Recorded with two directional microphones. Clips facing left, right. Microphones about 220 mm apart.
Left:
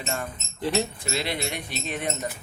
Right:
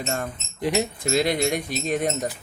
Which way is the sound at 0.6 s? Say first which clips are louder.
Right 2 dB; 15° right (ahead or behind).